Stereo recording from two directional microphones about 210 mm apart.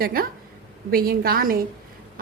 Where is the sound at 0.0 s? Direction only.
45° right (ahead or behind).